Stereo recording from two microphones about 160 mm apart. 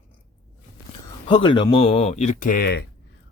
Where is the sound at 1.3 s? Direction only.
30° left (ahead or behind); by 2.8 s 80° left.